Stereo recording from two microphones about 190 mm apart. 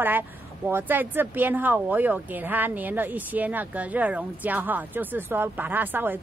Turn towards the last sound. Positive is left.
turn(degrees=-10)  # may be behind; listen again after turning